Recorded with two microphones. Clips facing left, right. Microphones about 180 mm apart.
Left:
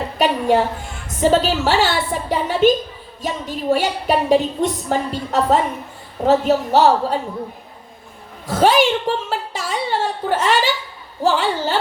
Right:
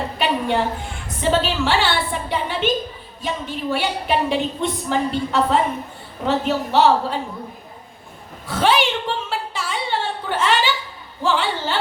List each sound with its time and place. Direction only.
0.2 s a sound: 40° left (ahead or behind)
1.2 s a woman's voice: 40° left (ahead or behind)
8.4 s a woman's voice: 40° left (ahead or behind)